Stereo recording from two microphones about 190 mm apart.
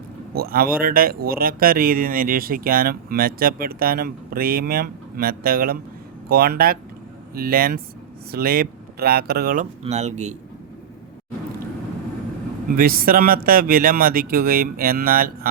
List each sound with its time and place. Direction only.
0.3 s speech: 50° right (ahead or behind)
9.8 s speech: 35° right (ahead or behind)
12.7 s speech: 50° right (ahead or behind)